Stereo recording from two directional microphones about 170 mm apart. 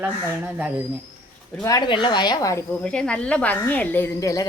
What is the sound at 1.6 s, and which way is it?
A woman's voice, 25° left (ahead or behind).